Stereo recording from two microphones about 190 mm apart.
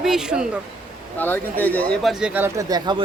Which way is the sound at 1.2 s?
10° left (ahead or behind).